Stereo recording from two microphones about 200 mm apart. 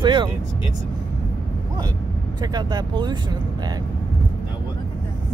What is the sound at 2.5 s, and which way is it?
Speech, 20° right (ahead or behind).